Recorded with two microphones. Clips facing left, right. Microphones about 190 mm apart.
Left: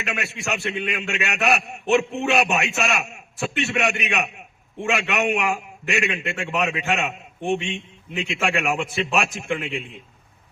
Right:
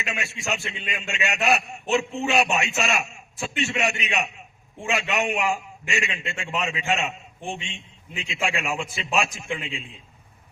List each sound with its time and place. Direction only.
0.0 s a man's voice: 65° left (ahead or behind)